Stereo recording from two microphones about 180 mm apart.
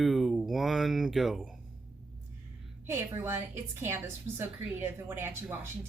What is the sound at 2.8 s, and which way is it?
A woman's voice, 15° right (ahead or behind).